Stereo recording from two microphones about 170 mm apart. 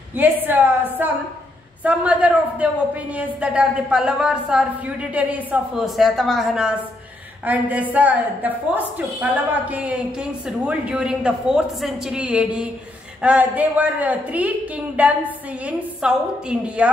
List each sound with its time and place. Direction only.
0.1 s a woman's voice: 10° right (ahead or behind)